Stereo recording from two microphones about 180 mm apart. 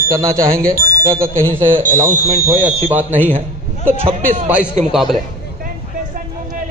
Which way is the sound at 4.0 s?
35° right (ahead or behind).